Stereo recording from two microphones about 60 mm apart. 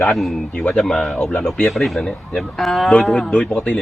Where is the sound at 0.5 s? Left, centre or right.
Centre.